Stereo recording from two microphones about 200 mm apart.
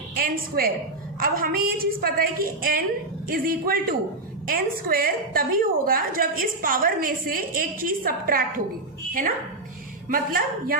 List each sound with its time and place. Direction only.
0.2 s a woman's voice: 45° right (ahead or behind)
10.1 s a woman's voice: 45° right (ahead or behind)